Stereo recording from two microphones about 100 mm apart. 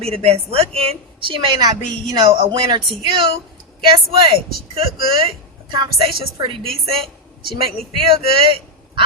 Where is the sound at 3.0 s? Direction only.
55° right (ahead or behind).